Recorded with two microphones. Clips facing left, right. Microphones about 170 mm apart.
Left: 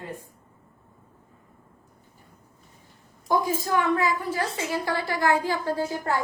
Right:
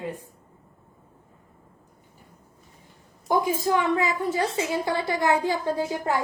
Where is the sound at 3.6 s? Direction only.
20° right (ahead or behind).